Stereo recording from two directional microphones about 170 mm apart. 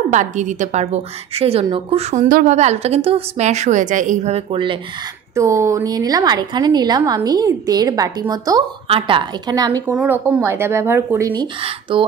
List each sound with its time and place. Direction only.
0.1 s a woman's voice: 45° right (ahead or behind)
5.3 s a woman's voice: 15° right (ahead or behind)
8.8 s a woman's voice: 30° right (ahead or behind)
9.8 s speech: 10° right (ahead or behind)
11.6 s a woman's voice: 30° right (ahead or behind)